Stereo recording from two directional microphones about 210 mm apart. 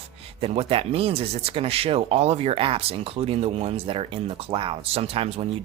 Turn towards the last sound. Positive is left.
turn(degrees=-25)  # may be behind; listen again after turning